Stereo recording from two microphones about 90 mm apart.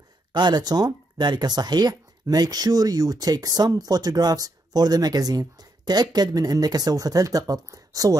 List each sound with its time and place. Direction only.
0.3 s speech: 55° right (ahead or behind)